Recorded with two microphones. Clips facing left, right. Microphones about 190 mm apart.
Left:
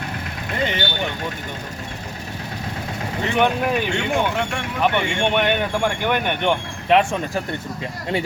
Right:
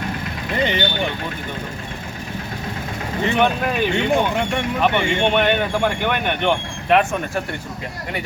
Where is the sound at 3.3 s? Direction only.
15° left (ahead or behind).